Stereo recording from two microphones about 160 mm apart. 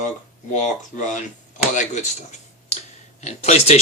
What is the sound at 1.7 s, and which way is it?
Speech, 50° left (ahead or behind).